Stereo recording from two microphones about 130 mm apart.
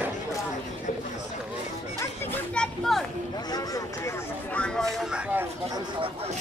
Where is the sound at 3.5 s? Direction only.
25° left (ahead or behind).